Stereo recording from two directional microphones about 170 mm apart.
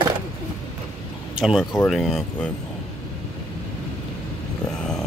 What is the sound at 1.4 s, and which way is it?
Speech, centre (ahead or behind).